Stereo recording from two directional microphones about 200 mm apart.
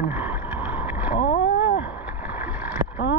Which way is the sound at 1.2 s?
50° left (ahead or behind).